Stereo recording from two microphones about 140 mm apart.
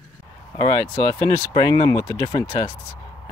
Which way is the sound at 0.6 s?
25° left (ahead or behind).